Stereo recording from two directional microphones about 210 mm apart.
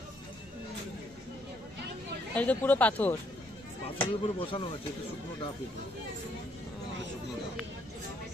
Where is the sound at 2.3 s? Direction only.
10° left (ahead or behind).